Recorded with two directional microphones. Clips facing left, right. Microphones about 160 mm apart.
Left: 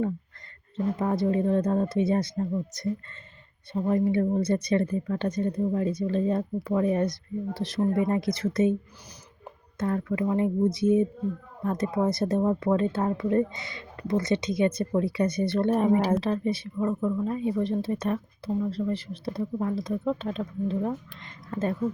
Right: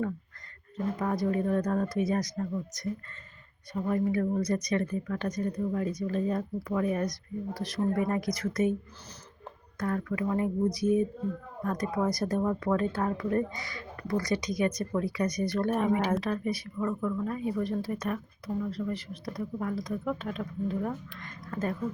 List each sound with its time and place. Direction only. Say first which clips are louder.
0.9 s speech: left 3 dB; 25° left (ahead or behind)
9.7 s speech: left 4 dB; 25° left (ahead or behind)